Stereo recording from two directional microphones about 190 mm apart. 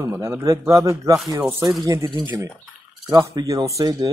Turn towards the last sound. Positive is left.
turn(degrees=-20)  # may be behind; listen again after turning